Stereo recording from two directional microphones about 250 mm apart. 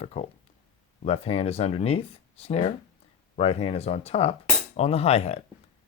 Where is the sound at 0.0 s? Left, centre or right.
Left.